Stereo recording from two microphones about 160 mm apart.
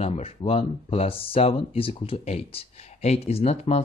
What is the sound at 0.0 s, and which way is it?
Speech, 40° left (ahead or behind).